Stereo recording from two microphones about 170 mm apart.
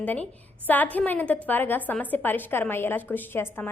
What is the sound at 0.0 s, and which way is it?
A woman's voice, 10° left (ahead or behind).